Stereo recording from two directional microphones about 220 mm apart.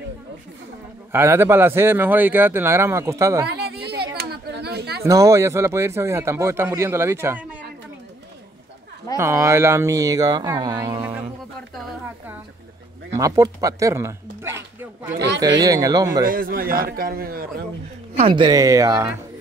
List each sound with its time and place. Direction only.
1.1 s speech: 10° right (ahead or behind)
3.4 s a sound: 45° right (ahead or behind)
5.0 s speech: 15° right (ahead or behind)
9.1 s speech: 15° right (ahead or behind)
13.1 s speech: 15° right (ahead or behind)
15.1 s speech: 50° right (ahead or behind)
15.4 s speech: 15° right (ahead or behind)
16.3 s a man's voice: 40° right (ahead or behind)
18.2 s speech: 20° right (ahead or behind)